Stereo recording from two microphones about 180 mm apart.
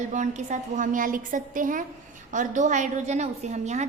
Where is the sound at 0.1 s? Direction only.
40° right (ahead or behind).